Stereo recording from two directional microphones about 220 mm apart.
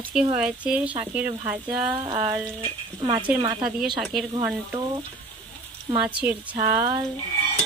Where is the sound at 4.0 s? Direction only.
Centre (ahead or behind).